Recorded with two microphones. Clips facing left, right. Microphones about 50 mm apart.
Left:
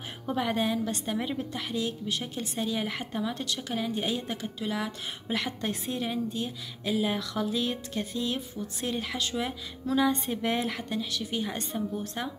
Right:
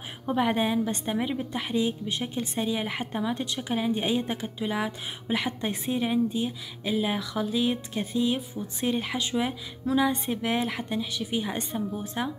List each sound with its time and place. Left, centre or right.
0.3 s a woman's voice: centre
10.8 s speech: centre